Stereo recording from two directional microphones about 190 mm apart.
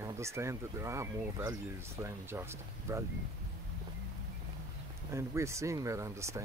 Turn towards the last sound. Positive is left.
turn(degrees=-15)  # may be behind; listen again after turning